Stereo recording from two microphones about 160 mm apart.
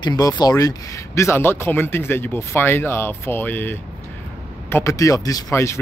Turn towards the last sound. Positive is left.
turn(degrees=15)  # may be behind; listen again after turning